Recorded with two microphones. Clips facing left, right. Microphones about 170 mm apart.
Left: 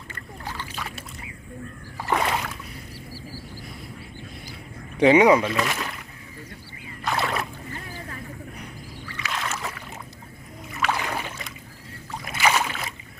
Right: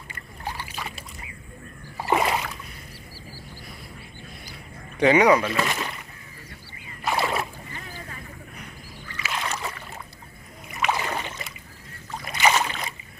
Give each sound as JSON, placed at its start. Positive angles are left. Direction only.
{"t": 0.1, "sound": "boat", "side_deg": -15}
{"t": 0.8, "sound": "boat", "side_deg": 0}
{"t": 2.0, "sound": "a sound", "side_deg": -10}
{"t": 4.9, "sound": "speech", "side_deg": 25}
{"t": 5.5, "sound": "speech", "side_deg": 0}
{"t": 7.2, "sound": "boat", "side_deg": 0}
{"t": 9.1, "sound": "rowboat", "side_deg": -5}
{"t": 10.7, "sound": "rowboat", "side_deg": -15}
{"t": 11.3, "sound": "boat", "side_deg": -5}